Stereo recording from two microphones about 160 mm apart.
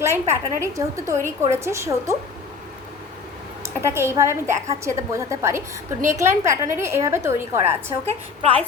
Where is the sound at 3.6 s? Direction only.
15° right (ahead or behind).